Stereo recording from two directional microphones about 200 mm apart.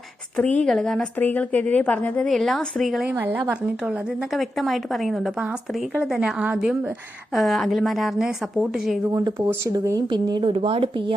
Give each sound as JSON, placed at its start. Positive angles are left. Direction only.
{"t": 0.3, "sound": "speech", "side_deg": 5}
{"t": 9.1, "sound": "speech", "side_deg": -15}